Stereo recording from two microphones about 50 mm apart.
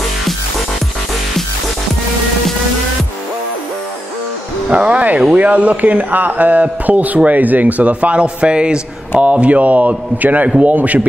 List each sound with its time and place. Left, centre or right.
4.6 s a man's voice: right